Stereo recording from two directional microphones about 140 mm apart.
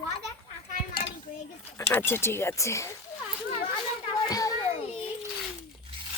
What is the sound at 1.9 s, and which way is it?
Speech, 15° left (ahead or behind).